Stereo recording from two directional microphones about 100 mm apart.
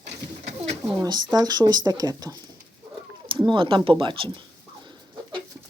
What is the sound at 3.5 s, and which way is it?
Speech, 55° right (ahead or behind).